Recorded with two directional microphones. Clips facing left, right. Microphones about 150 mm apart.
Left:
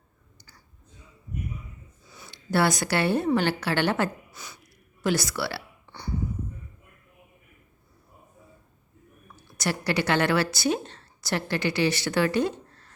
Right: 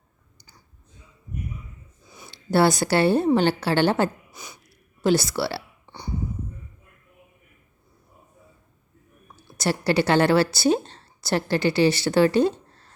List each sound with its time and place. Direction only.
2.0 s a sound: 15° right (ahead or behind)
2.3 s a woman's voice: 30° right (ahead or behind)
4.3 s a sound: 15° right (ahead or behind)
5.0 s a woman's voice: 30° right (ahead or behind)
5.8 s burping: 15° right (ahead or behind)
9.3 s a woman's voice: 30° right (ahead or behind)